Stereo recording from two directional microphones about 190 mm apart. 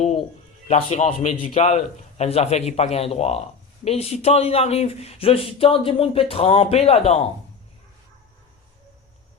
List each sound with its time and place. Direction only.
0.7 s speech: 35° left (ahead or behind)